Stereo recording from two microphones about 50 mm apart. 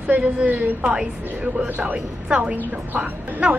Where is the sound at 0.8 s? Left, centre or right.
Centre.